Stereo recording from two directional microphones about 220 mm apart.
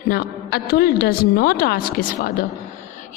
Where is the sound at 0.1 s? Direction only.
45° left (ahead or behind).